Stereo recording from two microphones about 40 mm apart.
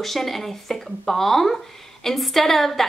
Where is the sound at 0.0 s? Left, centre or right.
Centre.